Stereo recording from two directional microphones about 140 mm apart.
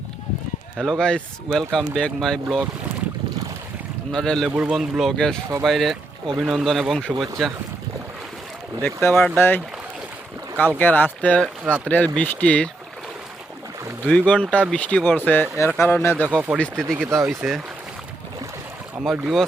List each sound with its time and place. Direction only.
0.8 s speech: 5° left (ahead or behind)
4.1 s speech: 5° left (ahead or behind)
8.8 s speech: 15° left (ahead or behind)
10.8 s speech: 10° left (ahead or behind)
14.1 s speech: 10° left (ahead or behind)
16.3 s speech: 10° right (ahead or behind)
16.8 s speech: 5° left (ahead or behind)
19.1 s speech: centre (ahead or behind)